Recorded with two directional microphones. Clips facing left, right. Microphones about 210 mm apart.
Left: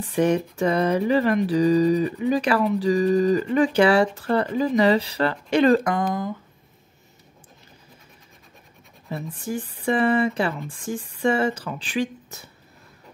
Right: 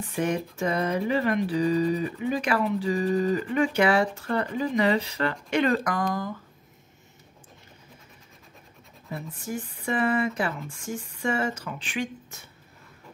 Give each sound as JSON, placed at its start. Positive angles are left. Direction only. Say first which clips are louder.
{"t": 0.1, "sound": "speech", "louder": "left 7 dB", "side_deg": 35}
{"t": 9.1, "sound": "speech", "louder": "left 4 dB", "side_deg": 30}